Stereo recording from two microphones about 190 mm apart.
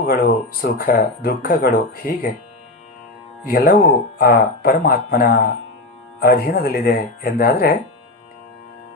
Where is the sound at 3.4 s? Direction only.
50° left (ahead or behind).